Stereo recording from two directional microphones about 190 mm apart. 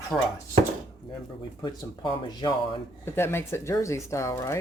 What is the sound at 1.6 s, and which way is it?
Speech, 20° left (ahead or behind).